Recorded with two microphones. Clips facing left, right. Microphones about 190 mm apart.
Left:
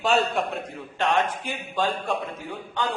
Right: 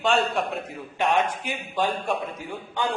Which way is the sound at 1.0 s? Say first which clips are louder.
Right 1 dB; 15° right (ahead or behind).